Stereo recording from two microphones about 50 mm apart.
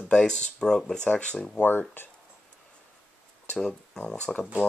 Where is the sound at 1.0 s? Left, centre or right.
Left.